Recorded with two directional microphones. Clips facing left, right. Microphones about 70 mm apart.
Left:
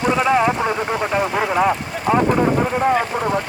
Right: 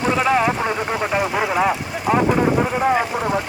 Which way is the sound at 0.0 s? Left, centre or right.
Centre.